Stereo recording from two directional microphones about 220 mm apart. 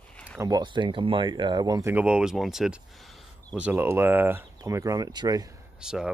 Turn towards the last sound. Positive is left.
turn(degrees=-5)  # may be behind; listen again after turning